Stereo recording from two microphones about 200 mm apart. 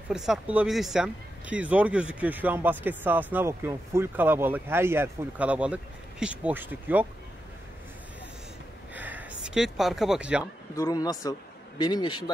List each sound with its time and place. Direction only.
0.1 s speech: 5° right (ahead or behind)
8.9 s a sound: 10° right (ahead or behind)
10.4 s a man's voice: 20° left (ahead or behind)